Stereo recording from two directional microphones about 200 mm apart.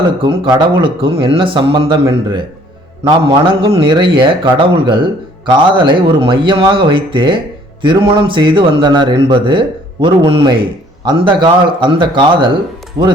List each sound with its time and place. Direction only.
0.2 s speech: 20° right (ahead or behind)